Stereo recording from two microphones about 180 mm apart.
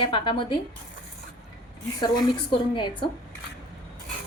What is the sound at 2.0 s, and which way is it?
Speech, 25° left (ahead or behind).